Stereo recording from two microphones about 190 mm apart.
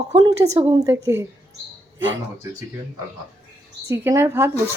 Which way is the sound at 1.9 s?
85° right.